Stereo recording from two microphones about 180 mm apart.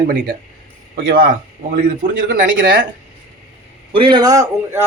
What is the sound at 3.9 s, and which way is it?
Speech, 25° right (ahead or behind).